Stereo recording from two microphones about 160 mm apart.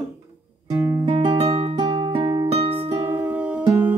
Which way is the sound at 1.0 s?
35° right (ahead or behind).